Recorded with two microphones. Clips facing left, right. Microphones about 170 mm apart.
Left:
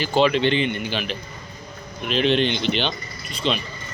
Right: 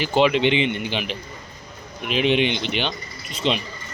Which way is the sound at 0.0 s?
15° right (ahead or behind).